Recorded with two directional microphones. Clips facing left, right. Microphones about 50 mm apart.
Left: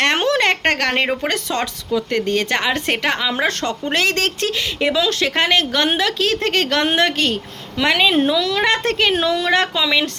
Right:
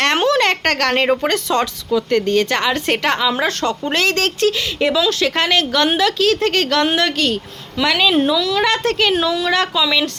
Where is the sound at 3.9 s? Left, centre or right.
Left.